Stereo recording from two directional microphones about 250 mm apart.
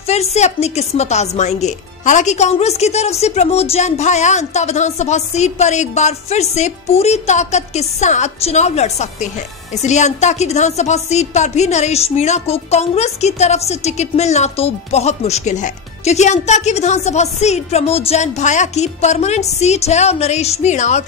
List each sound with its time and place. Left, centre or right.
0.0 s a woman's voice: left